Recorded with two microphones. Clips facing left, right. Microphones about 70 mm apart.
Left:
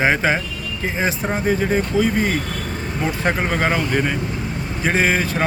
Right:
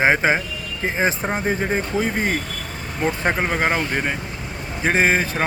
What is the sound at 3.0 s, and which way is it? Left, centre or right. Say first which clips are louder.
Speech: even; centre.